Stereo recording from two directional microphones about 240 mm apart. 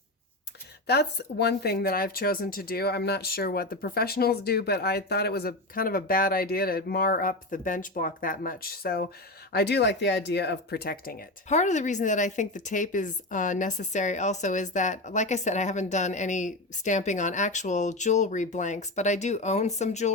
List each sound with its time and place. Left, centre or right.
0.9 s speech: left